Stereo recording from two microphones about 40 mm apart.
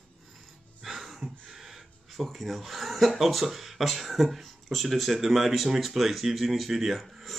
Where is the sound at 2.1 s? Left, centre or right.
Centre.